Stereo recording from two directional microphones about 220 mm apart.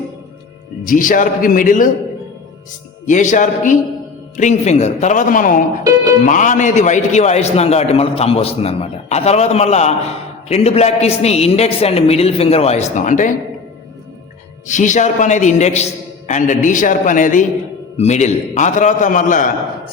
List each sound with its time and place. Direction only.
0.9 s a man's voice: 40° left (ahead or behind)
3.1 s a man's voice: 35° left (ahead or behind)
14.7 s a man's voice: 35° left (ahead or behind)